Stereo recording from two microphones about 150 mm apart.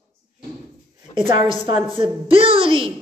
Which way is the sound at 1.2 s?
35° right (ahead or behind).